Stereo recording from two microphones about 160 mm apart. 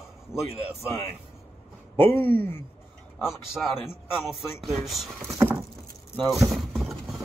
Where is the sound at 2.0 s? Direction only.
15° left (ahead or behind).